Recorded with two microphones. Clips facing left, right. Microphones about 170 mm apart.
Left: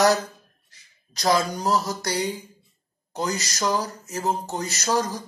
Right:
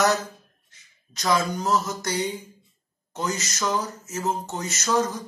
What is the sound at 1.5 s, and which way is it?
Speech, 35° left (ahead or behind).